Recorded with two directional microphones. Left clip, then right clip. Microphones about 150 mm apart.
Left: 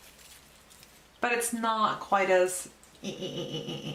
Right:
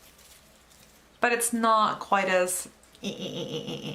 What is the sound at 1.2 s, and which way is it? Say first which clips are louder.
Speech: right 4 dB; 30° right (ahead or behind).